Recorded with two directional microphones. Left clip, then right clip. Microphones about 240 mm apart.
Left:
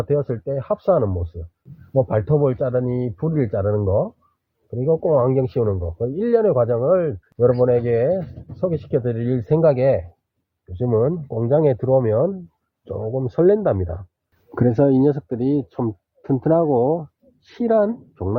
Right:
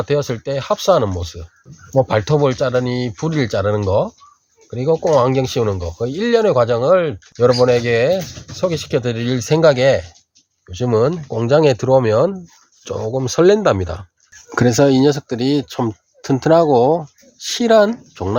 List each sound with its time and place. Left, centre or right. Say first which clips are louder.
0.0 s speech: right 3 dB; centre